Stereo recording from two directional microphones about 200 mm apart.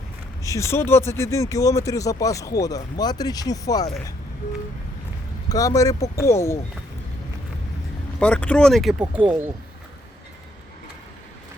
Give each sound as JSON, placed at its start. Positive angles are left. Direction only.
{"t": 0.4, "sound": "speech", "side_deg": 15}
{"t": 5.5, "sound": "speech", "side_deg": 15}
{"t": 8.2, "sound": "speech", "side_deg": 5}